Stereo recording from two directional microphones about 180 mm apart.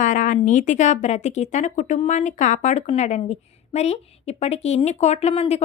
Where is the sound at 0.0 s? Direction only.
45° left (ahead or behind).